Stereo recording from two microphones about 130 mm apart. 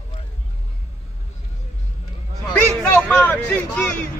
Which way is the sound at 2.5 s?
5° left (ahead or behind).